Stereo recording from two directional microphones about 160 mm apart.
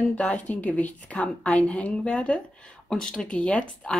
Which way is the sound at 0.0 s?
5° left (ahead or behind).